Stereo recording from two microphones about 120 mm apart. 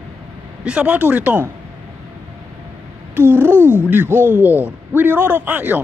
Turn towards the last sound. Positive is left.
turn(degrees=-15)  # may be behind; listen again after turning